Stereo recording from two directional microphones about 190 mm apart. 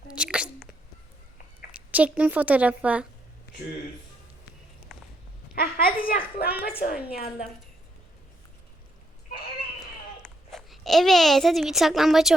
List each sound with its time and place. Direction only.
0.1 s sneeze: 5° right (ahead or behind)
1.9 s a woman's voice: 5° right (ahead or behind)
4.9 s walk: centre (ahead or behind)
5.7 s a child's voice: 50° left (ahead or behind)
9.8 s a sound: centre (ahead or behind)